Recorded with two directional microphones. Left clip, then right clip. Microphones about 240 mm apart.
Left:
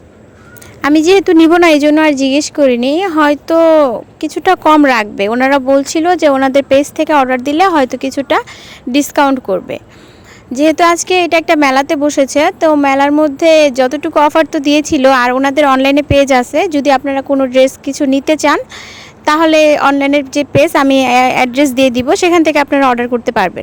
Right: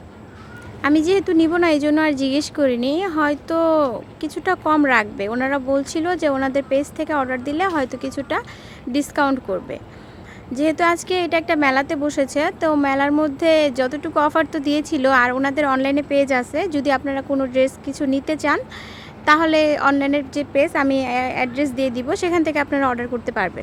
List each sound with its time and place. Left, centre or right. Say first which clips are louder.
0.8 s speech: left 9 dB; left